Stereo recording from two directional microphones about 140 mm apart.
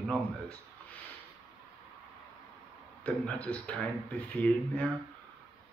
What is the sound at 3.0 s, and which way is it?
Speech, 10° left (ahead or behind).